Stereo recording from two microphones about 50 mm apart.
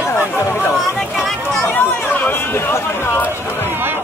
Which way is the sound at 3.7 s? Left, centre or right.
Right.